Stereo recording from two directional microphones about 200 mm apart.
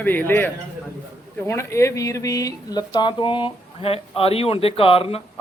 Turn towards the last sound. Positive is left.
turn(degrees=30)  # may be behind; listen again after turning